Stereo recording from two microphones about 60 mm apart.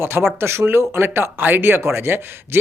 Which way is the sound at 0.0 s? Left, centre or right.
Right.